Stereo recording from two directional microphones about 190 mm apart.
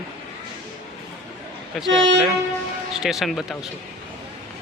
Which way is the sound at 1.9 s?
80° right.